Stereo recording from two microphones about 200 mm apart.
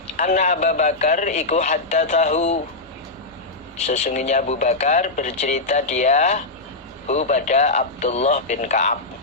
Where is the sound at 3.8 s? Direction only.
35° left (ahead or behind).